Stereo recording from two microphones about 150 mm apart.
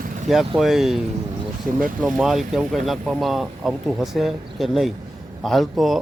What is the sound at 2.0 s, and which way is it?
Speech, centre (ahead or behind).